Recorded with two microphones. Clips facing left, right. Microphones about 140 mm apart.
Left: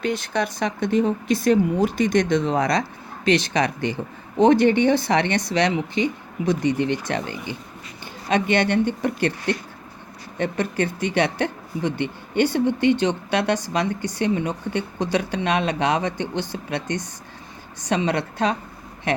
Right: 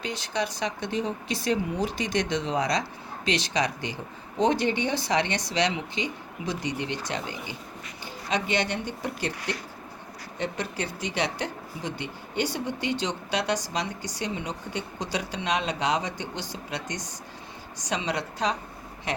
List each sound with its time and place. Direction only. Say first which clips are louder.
0.0 s speech: left 6 dB; 55° left (ahead or behind)